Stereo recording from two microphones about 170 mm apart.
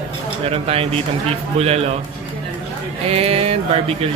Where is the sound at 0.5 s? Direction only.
35° right (ahead or behind).